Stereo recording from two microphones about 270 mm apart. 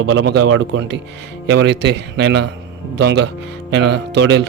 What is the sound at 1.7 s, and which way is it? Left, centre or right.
Speech, right.